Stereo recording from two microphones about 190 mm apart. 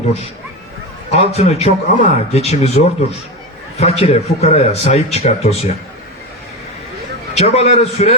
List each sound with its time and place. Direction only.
1.1 s speech: 35° left (ahead or behind)
7.3 s speech: 35° left (ahead or behind)